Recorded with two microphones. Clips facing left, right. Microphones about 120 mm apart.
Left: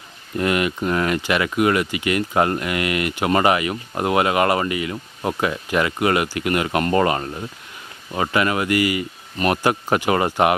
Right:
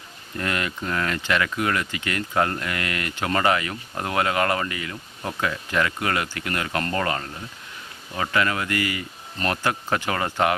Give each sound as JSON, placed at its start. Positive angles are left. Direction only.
{"t": 0.3, "sound": "speech", "side_deg": 15}